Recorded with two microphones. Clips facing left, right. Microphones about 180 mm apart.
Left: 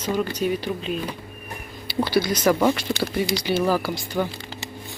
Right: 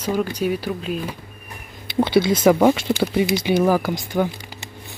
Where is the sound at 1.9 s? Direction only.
25° right (ahead or behind).